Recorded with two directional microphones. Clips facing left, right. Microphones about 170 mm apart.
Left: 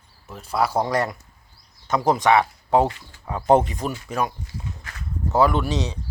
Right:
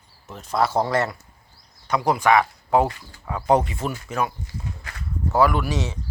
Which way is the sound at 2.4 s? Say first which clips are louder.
Left 1 dB; 25° left (ahead or behind).